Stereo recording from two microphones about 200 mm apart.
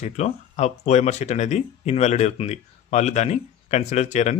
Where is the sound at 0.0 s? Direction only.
35° left (ahead or behind).